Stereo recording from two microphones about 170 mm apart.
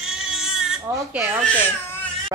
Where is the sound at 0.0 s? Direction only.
5° right (ahead or behind).